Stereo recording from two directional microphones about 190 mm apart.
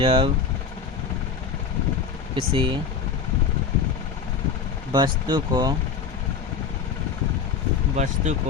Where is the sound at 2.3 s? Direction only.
25° right (ahead or behind).